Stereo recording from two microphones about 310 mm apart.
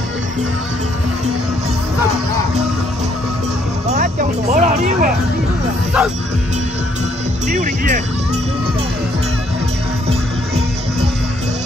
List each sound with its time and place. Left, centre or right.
3.9 s speech: right
6.0 s speech: centre
7.4 s speech: right